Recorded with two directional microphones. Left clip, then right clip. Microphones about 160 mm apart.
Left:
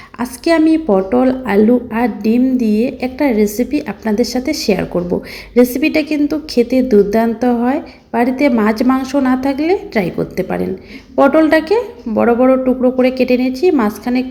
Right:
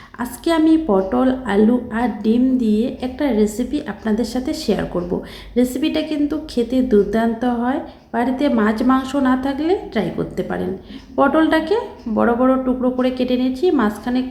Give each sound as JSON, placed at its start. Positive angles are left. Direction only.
{"t": 0.2, "sound": "a woman's voice", "side_deg": 15}